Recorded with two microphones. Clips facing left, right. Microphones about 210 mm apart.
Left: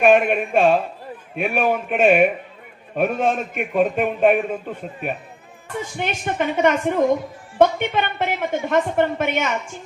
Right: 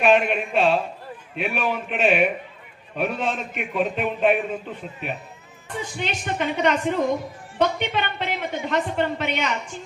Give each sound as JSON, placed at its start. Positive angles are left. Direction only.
{"t": 0.0, "sound": "a man's voice", "side_deg": 50}